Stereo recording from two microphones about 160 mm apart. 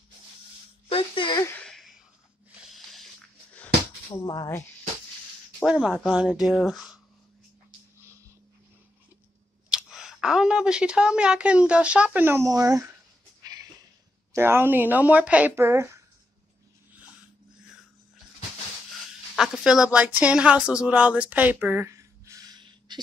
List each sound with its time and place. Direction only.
0.8 s a sound: 35° left (ahead or behind)
1.6 s a sound: 5° left (ahead or behind)
2.7 s snort: centre (ahead or behind)
4.1 s speech: 25° left (ahead or behind)
4.5 s speech: 15° left (ahead or behind)
5.7 s speech: 5° right (ahead or behind)
8.0 s a sound: 15° right (ahead or behind)
9.7 s speech: 5° right (ahead or behind); by 12.9 s 20° right (ahead or behind)
14.3 s speech: 15° right (ahead or behind)
19.3 s speech: 5° right (ahead or behind); by 22.9 s 25° right (ahead or behind)